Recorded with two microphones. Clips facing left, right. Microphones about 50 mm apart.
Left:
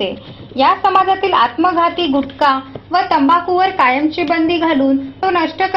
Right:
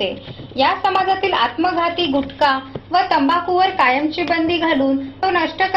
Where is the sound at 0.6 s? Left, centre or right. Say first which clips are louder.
Left 5 dB; centre.